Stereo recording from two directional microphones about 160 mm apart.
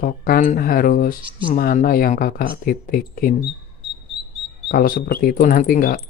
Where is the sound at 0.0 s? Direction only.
65° left (ahead or behind).